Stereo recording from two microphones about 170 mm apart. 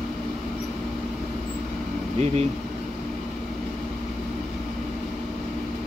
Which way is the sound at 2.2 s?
40° right (ahead or behind).